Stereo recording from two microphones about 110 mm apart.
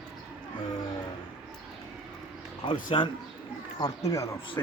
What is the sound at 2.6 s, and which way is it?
Speech, 50° left (ahead or behind).